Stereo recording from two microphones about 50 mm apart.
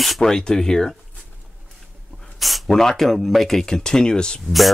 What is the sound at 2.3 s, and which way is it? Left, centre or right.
Speech, centre.